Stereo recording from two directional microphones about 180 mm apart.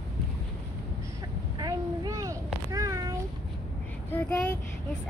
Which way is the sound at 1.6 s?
20° right (ahead or behind).